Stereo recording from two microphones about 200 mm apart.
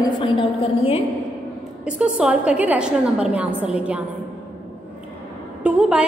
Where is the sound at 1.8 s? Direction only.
5° right (ahead or behind).